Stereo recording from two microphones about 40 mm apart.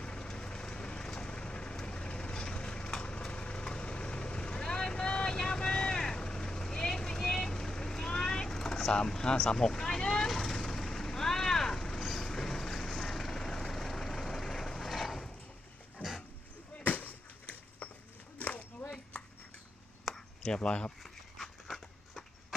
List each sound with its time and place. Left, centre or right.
0.0 s vehicle: left
8.5 s speech: centre
10.0 s vehicle: centre
16.8 s basketball bounce: left
20.1 s a sound: centre
20.4 s speech: left